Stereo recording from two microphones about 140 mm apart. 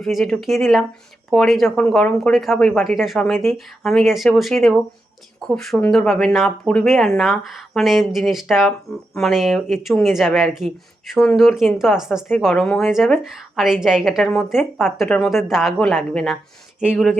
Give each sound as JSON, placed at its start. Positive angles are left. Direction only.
{"t": 0.0, "sound": "speech", "side_deg": 0}